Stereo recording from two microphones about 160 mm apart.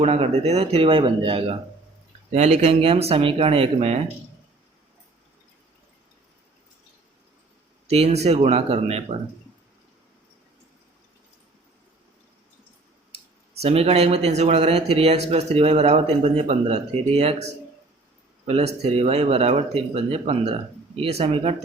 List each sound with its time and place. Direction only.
0.0 s speech: 40° right (ahead or behind)
7.9 s speech: 40° right (ahead or behind)
13.6 s speech: 40° right (ahead or behind)